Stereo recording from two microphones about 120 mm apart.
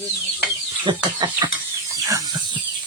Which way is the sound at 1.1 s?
40° right (ahead or behind).